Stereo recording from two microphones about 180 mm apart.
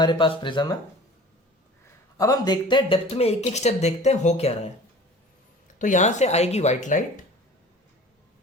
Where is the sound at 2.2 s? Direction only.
20° left (ahead or behind); by 4.5 s 40° left (ahead or behind).